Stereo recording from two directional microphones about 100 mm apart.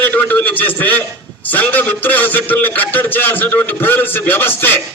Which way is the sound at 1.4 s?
20° left (ahead or behind).